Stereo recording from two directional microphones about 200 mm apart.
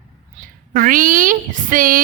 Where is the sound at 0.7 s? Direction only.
40° right (ahead or behind).